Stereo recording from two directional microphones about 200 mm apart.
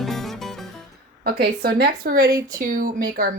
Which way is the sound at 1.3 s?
50° right (ahead or behind).